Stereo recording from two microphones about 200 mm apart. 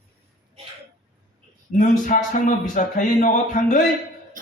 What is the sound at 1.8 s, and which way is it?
Speech, 40° left (ahead or behind).